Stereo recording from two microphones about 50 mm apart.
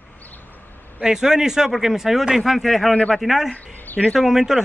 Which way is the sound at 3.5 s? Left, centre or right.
Left.